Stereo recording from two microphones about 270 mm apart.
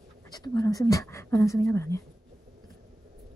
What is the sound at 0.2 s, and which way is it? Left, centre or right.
Speech, centre.